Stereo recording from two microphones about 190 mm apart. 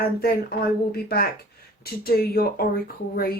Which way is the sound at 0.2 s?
55° left (ahead or behind).